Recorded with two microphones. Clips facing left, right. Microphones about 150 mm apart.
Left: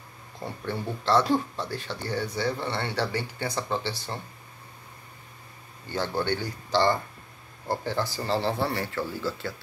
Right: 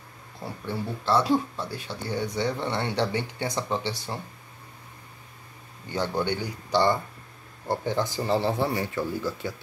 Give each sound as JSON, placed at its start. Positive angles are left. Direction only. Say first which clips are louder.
{"t": 0.7, "sound": "speech", "louder": "even", "side_deg": -5}
{"t": 6.2, "sound": "speech", "louder": "even", "side_deg": -15}